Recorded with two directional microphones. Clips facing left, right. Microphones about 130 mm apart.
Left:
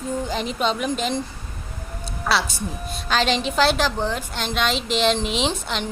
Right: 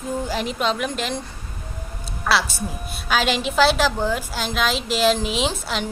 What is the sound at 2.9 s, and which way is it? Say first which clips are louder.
A woman's voice: even; 5° right (ahead or behind).